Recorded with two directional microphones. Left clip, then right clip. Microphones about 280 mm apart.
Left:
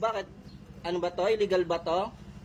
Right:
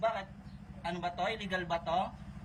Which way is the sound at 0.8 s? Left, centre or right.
Centre.